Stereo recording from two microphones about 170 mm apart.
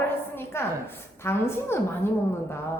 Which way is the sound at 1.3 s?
15° left (ahead or behind).